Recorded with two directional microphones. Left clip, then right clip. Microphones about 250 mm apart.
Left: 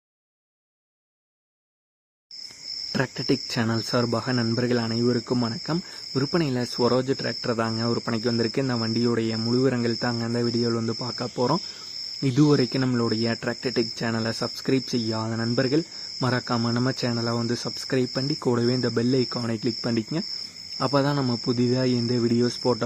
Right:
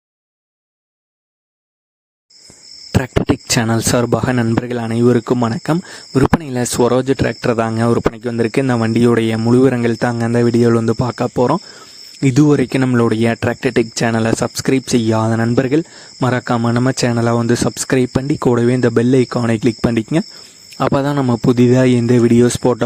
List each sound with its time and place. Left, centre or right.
2.9 s speech: right